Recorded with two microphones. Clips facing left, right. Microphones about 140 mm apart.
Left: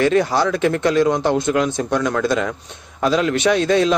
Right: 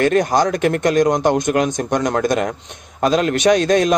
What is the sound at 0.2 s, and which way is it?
A man's voice, 15° right (ahead or behind).